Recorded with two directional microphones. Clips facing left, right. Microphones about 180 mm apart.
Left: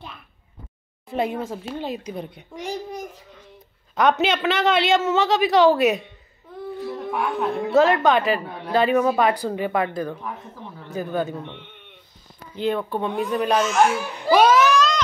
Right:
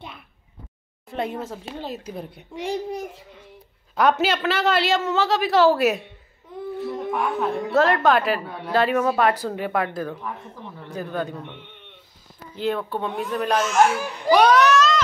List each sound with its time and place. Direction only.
1.1 s a woman's voice: centre (ahead or behind)
2.5 s a child's voice: 30° right (ahead or behind)
3.9 s a woman's voice: 5° right (ahead or behind)
12.5 s a woman's voice: centre (ahead or behind)
14.3 s baby cry: centre (ahead or behind)